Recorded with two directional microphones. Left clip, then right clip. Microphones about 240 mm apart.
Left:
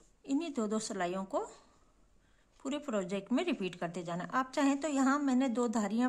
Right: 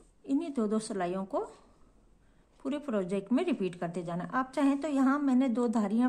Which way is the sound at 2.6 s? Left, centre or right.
Centre.